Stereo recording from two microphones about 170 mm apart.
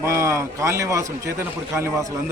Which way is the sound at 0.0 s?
15° right (ahead or behind).